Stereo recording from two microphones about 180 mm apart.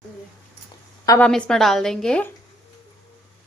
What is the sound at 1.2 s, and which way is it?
A woman's voice, 5° left (ahead or behind).